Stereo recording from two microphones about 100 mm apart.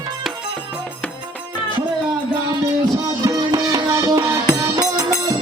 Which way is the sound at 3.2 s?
35° right (ahead or behind).